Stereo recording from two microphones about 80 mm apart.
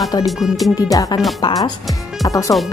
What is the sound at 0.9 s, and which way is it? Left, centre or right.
Speech, left.